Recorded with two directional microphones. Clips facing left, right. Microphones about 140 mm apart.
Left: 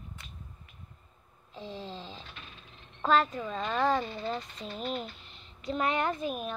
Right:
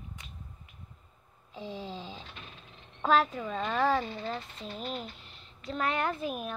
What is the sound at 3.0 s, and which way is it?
Speech, 10° right (ahead or behind).